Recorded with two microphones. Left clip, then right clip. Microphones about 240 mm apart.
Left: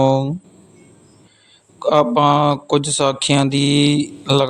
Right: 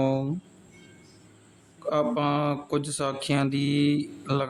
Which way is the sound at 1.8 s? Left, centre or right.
Left.